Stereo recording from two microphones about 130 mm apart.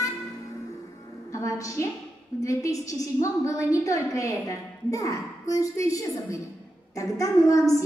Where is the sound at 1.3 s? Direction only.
25° left (ahead or behind).